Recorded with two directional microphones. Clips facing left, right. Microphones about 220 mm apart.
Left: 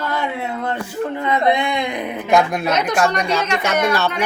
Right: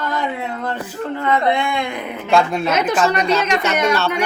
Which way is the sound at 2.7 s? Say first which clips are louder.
Right 1 dB; 5° right (ahead or behind).